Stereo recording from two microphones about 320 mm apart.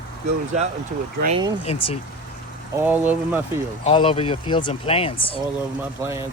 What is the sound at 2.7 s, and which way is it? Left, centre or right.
Speech, centre.